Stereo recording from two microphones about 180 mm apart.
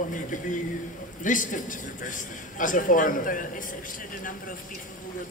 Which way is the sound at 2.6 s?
50° left (ahead or behind).